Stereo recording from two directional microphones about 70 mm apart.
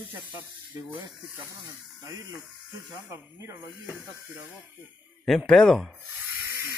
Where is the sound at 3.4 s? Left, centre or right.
Right.